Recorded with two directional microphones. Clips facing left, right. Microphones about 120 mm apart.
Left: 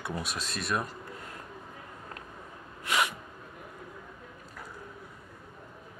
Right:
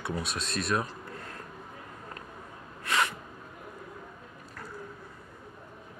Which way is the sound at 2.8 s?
15° left (ahead or behind).